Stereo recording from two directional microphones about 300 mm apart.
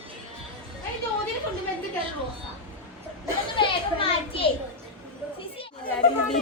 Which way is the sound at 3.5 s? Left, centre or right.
Centre.